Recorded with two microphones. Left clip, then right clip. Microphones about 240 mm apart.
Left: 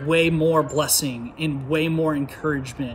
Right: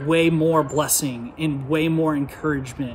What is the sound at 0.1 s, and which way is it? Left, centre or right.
Speech, centre.